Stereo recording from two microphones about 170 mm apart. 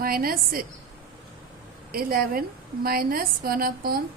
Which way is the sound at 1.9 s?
60° right (ahead or behind).